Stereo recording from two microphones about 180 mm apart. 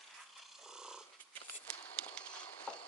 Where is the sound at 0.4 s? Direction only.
Centre (ahead or behind).